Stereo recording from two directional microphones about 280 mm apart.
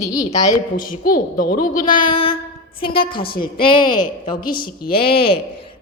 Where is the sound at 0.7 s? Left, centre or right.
Left.